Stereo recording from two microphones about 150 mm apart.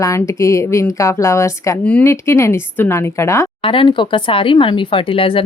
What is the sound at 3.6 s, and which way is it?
Speech, 35° left (ahead or behind).